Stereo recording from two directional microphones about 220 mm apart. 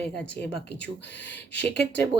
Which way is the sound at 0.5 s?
50° left (ahead or behind).